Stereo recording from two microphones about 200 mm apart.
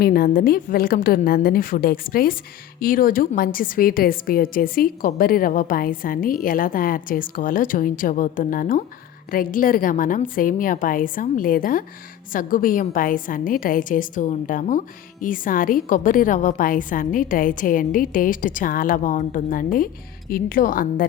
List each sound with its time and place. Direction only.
0.0 s a woman's voice: 45° left (ahead or behind)